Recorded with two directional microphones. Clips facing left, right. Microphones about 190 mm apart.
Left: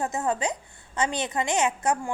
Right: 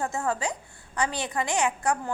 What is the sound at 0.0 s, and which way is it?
A woman's voice, 20° left (ahead or behind).